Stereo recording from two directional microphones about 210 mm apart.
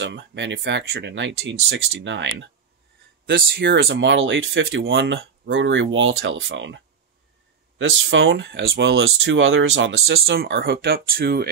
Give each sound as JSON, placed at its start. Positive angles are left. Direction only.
{"t": 0.0, "sound": "speech", "side_deg": -55}
{"t": 8.1, "sound": "speech", "side_deg": -60}